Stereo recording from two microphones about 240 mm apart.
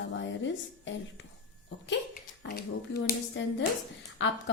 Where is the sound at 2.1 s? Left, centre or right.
Left.